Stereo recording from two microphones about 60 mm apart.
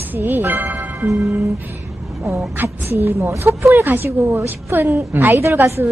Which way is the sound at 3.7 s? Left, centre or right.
Right.